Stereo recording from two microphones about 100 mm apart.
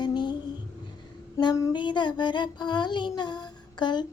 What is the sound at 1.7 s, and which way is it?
Child singing, 50° left (ahead or behind).